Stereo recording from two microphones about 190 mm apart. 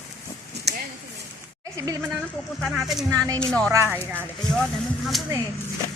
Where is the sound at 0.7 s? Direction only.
60° right (ahead or behind).